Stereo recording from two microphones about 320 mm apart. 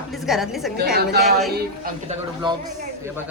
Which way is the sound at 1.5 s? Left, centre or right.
Right.